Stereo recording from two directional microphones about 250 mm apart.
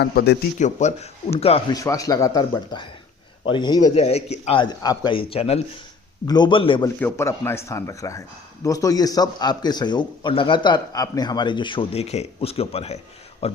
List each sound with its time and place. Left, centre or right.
0.0 s a man's voice: left